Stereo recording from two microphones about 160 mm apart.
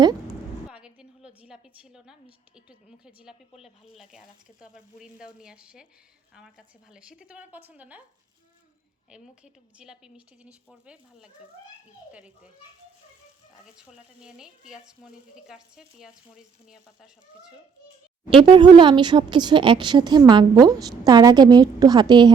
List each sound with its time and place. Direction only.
0.7 s a sound: 5° right (ahead or behind)
2.6 s a woman's voice: 5° right (ahead or behind)
9.0 s a woman's voice: 5° right (ahead or behind)
13.7 s a woman's voice: 5° right (ahead or behind)
18.3 s a woman's voice: 30° right (ahead or behind)